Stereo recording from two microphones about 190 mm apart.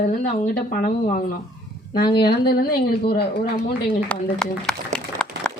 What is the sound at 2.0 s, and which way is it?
Speech, 25° left (ahead or behind).